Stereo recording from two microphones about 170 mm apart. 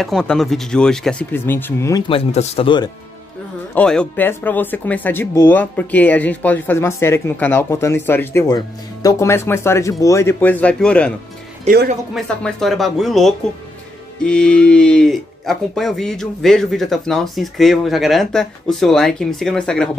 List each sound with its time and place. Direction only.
0.0 s speech: 5° left (ahead or behind)
2.0 s speech: 35° left (ahead or behind)
3.7 s speech: 5° left (ahead or behind)